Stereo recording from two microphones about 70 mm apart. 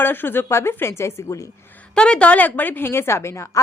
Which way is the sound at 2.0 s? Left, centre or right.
Centre.